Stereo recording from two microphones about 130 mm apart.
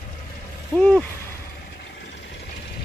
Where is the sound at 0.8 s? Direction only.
10° left (ahead or behind).